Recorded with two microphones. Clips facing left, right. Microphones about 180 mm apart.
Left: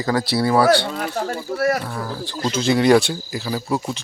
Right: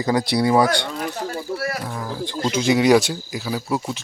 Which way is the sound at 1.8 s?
15° right (ahead or behind).